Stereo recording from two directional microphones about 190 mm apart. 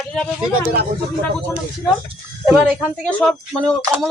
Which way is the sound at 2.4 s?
5° right (ahead or behind).